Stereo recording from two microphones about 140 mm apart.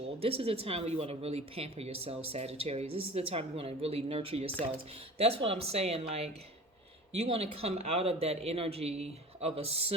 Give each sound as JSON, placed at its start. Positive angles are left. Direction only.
{"t": 0.2, "sound": "speech", "side_deg": -45}